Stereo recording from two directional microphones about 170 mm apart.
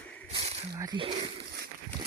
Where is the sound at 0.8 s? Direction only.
30° right (ahead or behind).